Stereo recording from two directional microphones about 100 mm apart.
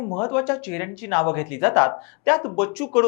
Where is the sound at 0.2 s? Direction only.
20° left (ahead or behind).